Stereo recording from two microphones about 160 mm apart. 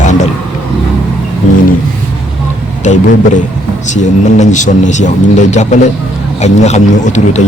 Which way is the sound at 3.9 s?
50° left (ahead or behind).